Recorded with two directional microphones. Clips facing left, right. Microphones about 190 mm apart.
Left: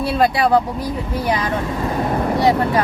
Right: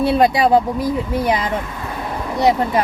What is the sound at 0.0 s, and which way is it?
Speech, 20° right (ahead or behind).